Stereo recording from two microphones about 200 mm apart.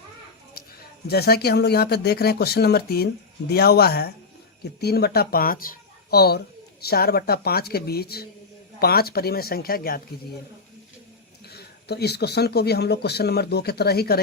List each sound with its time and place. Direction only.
0.5 s speech: 50° left (ahead or behind)
11.4 s speech: 55° left (ahead or behind)